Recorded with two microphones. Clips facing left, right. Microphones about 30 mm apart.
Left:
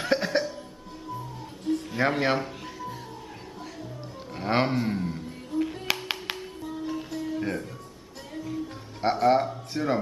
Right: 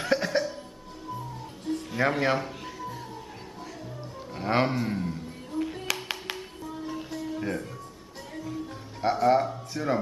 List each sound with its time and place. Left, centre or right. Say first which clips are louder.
0.0 s music: left 1 dB; centre
1.7 s music: left 3 dB; centre
2.0 s speech: even; centre
2.4 s music: even; centre
4.3 s roaring cats: even; centre
5.5 s music: left 3 dB; centre
9.0 s speech: left 1 dB; left